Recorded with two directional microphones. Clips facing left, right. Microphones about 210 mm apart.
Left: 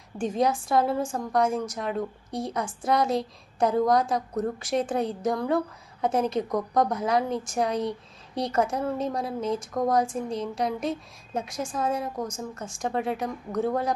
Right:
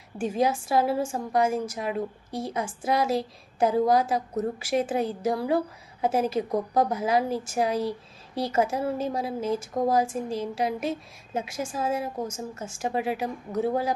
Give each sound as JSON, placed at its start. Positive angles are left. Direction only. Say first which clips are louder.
{"t": 0.2, "sound": "a woman's voice", "louder": "even", "side_deg": -5}